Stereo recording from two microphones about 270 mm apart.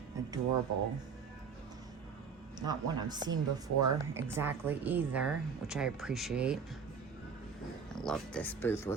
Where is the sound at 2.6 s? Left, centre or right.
Centre.